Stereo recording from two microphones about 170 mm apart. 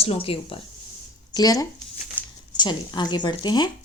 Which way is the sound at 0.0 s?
35° left (ahead or behind).